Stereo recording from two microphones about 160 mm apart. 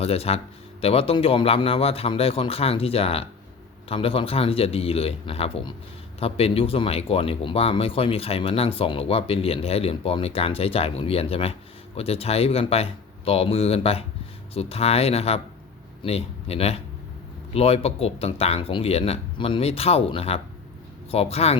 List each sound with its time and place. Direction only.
0.0 s speech: 40° left (ahead or behind)